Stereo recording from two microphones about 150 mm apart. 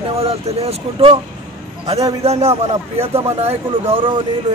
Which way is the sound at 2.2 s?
45° right (ahead or behind).